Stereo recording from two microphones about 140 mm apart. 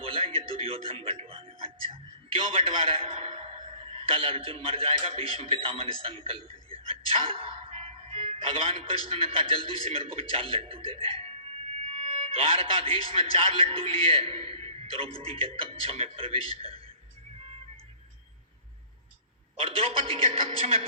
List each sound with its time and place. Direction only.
0.0 s a man's voice: 40° right (ahead or behind)
19.6 s speech: 40° right (ahead or behind)